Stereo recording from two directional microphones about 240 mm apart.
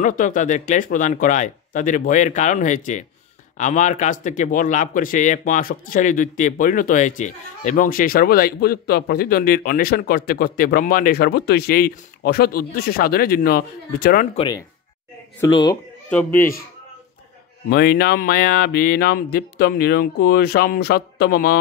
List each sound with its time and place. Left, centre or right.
0.0 s a man's voice: left
14.3 s speech: left
17.6 s a man's voice: left